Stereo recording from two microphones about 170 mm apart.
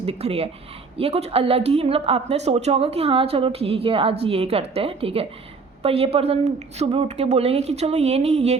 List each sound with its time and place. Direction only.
0.0 s a woman's voice: 35° right (ahead or behind)